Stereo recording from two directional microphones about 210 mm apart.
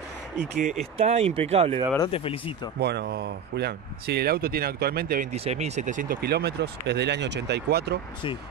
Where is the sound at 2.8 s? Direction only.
50° right (ahead or behind).